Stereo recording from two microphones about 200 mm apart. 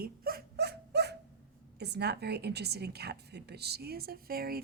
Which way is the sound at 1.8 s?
55° right (ahead or behind).